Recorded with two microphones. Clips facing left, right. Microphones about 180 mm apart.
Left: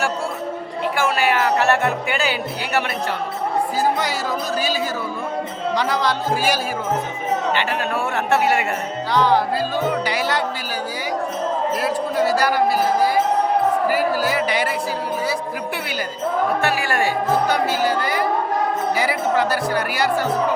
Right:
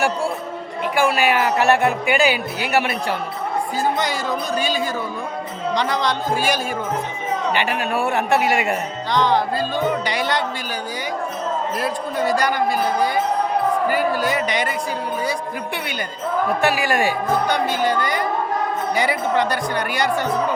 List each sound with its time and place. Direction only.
0.9 s speech: 15° right (ahead or behind)
3.9 s speech: 5° left (ahead or behind)
7.5 s speech: 15° right (ahead or behind)
9.1 s speech: 10° left (ahead or behind)
11.8 s speech: 5° left (ahead or behind)
16.6 s speech: 15° right (ahead or behind)
17.5 s speech: 5° left (ahead or behind)